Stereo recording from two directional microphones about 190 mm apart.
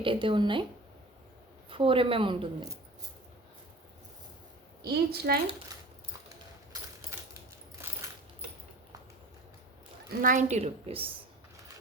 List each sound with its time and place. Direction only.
0.0 s a woman's voice: 25° right (ahead or behind)
1.7 s a woman's voice: 30° right (ahead or behind)
4.8 s a woman's voice: 55° right (ahead or behind)
10.2 s a woman's voice: 45° right (ahead or behind)